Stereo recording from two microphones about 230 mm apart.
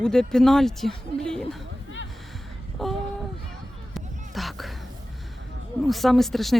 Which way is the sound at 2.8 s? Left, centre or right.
Centre.